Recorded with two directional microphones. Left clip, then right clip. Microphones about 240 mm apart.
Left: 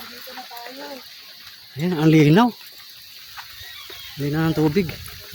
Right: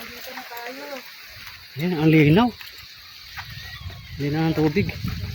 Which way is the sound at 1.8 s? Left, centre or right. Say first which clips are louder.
Left 1 dB; centre.